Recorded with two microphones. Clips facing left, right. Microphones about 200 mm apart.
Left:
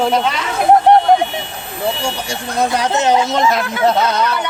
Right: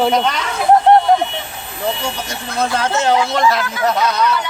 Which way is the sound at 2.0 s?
15° left (ahead or behind).